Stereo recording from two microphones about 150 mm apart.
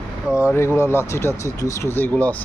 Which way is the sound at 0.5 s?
15° left (ahead or behind).